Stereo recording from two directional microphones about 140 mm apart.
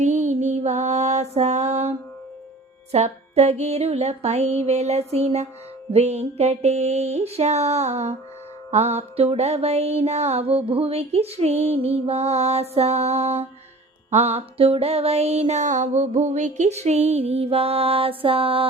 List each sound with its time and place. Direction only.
0.0 s music: 60° right (ahead or behind)
2.9 s music: 50° right (ahead or behind)